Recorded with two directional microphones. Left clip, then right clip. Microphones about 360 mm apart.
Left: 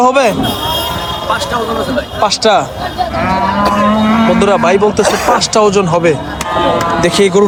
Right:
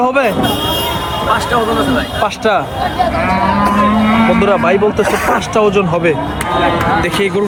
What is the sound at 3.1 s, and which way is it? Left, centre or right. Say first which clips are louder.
Livestock: even; left.